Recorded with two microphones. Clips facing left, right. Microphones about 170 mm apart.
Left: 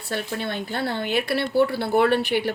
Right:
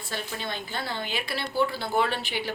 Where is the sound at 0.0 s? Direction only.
65° left (ahead or behind).